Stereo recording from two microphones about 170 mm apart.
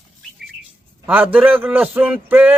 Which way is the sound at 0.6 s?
10° right (ahead or behind).